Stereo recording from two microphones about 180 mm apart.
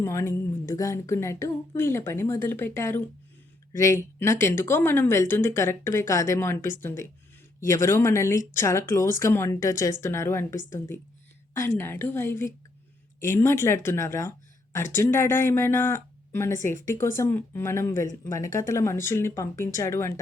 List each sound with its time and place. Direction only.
0.0 s speech: 15° left (ahead or behind)